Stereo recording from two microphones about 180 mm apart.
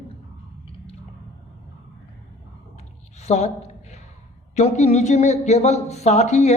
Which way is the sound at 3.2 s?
40° left (ahead or behind).